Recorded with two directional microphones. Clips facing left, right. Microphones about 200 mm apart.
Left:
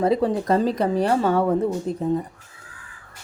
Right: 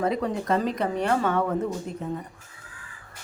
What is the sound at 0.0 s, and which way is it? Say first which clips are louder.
Speech: left 6 dB; 30° left (ahead or behind).